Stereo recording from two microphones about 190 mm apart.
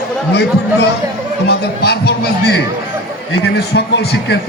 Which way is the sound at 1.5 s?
60° left (ahead or behind).